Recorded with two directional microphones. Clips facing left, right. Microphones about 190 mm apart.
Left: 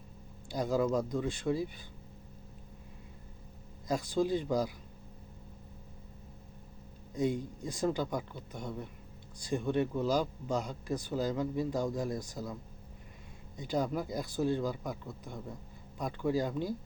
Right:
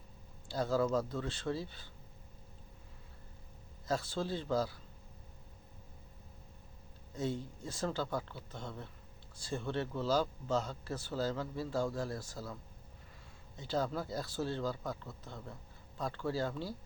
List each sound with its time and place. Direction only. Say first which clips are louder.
0.4 s speech: left 2 dB; 15° left (ahead or behind)
3.8 s speech: left 5 dB; 15° left (ahead or behind)
7.1 s speech: left 5 dB; 15° left (ahead or behind)
13.6 s speech: left 3 dB; 15° left (ahead or behind)